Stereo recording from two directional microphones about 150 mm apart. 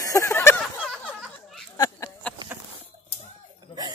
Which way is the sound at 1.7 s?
30° left (ahead or behind).